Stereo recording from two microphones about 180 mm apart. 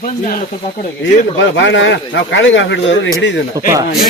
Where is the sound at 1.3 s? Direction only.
90° left.